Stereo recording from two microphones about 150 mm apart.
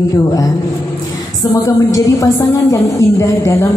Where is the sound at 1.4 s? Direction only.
20° left (ahead or behind).